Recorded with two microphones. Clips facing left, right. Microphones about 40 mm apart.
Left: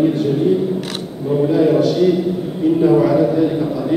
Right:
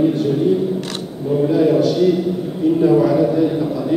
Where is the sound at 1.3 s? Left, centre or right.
Centre.